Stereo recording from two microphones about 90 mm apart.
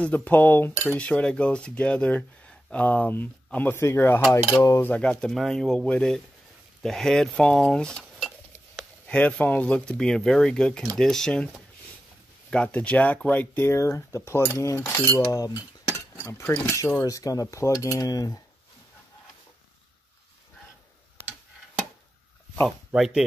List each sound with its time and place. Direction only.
0.0 s speech: 15° left (ahead or behind)
0.9 s speech: 10° left (ahead or behind)
5.3 s speech: 5° left (ahead or behind)
12.4 s speech: 15° left (ahead or behind); by 18.4 s 45° left (ahead or behind)
22.9 s speech: 5° right (ahead or behind)